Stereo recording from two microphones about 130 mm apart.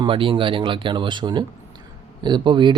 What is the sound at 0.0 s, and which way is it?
Speech, 40° right (ahead or behind).